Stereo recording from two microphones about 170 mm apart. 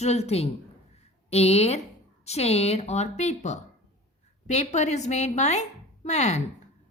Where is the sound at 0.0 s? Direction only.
40° left (ahead or behind).